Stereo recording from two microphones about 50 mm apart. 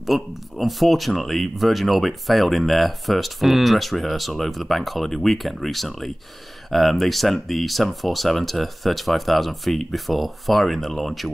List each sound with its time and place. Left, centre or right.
0.0 s speech: centre